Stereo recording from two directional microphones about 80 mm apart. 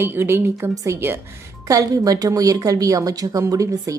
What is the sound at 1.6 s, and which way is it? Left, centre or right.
Speech, right.